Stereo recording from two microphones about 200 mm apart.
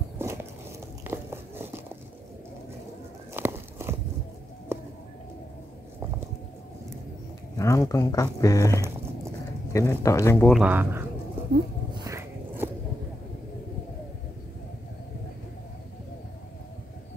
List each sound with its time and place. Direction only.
0.2 s walk: 15° right (ahead or behind)
1.0 s biting: 10° right (ahead or behind)
3.3 s a sound: 10° right (ahead or behind)
7.5 s speech: 15° left (ahead or behind)
10.5 s speech: 10° right (ahead or behind)
11.9 s a sound: 15° right (ahead or behind)